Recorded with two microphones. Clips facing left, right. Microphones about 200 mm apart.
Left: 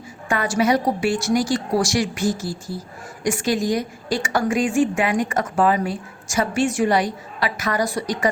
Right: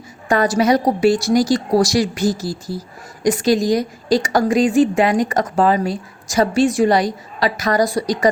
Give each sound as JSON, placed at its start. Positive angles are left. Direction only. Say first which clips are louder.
{"t": 0.3, "sound": "a woman's voice", "louder": "right 4 dB", "side_deg": -40}